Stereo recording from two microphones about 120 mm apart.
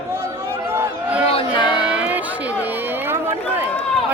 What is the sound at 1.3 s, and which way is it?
Music, 50° left (ahead or behind).